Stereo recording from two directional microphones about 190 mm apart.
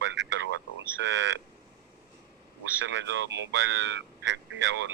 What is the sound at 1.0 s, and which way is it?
Speech, 75° right (ahead or behind).